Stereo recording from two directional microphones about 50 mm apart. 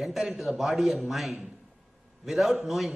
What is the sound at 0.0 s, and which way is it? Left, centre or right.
A man's voice, centre.